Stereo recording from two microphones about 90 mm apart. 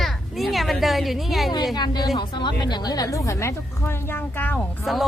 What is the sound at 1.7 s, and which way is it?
A woman's voice, 50° left (ahead or behind).